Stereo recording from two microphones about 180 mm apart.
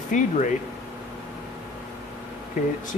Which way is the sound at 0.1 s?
45° left (ahead or behind).